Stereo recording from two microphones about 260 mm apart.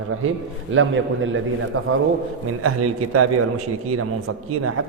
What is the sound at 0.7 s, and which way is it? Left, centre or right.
A man's voice, right.